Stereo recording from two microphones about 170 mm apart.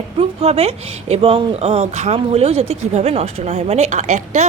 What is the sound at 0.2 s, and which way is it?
Speech, 40° right (ahead or behind).